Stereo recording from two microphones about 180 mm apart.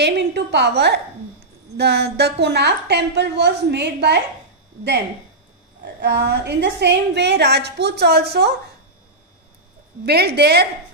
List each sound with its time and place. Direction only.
0.0 s a woman's voice: 70° right (ahead or behind)
6.2 s a woman's voice: 65° right (ahead or behind)
10.0 s a woman's voice: 65° right (ahead or behind)